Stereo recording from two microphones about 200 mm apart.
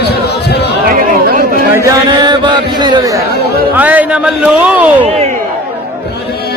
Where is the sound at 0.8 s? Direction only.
45° right (ahead or behind).